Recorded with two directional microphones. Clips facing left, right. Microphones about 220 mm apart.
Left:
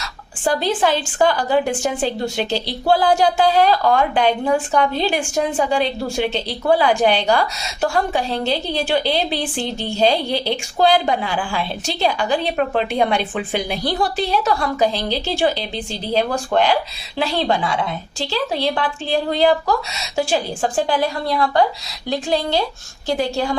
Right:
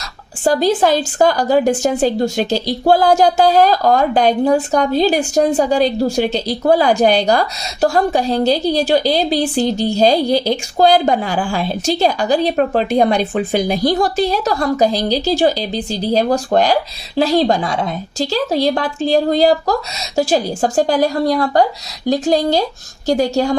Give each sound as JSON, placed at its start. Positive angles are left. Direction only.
{"t": 0.4, "sound": "a woman's voice", "side_deg": -40}